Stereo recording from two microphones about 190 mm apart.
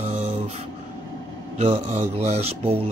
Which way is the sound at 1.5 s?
35° right (ahead or behind).